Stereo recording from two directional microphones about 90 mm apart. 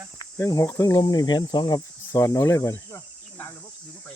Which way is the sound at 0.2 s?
35° left (ahead or behind).